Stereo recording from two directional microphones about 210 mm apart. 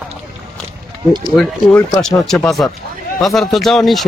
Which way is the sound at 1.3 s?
Centre (ahead or behind).